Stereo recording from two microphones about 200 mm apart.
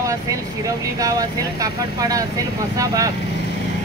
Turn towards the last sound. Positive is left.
turn(degrees=-15)  # may be behind; listen again after turning